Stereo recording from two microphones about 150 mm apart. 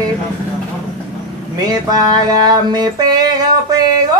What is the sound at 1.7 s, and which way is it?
Music, 25° right (ahead or behind).